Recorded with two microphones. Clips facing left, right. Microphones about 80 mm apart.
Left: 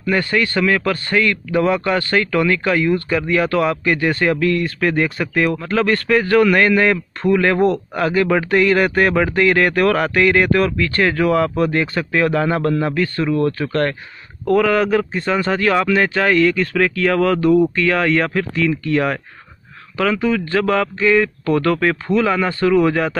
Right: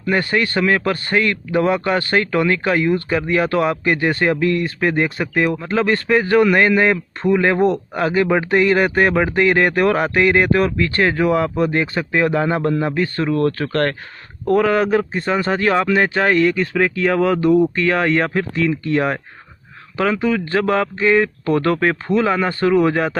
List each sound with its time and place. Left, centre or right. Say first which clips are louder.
0.0 s speech: even; right
13.2 s speech: even; right
14.5 s speech: even; right
17.7 s speech: even; right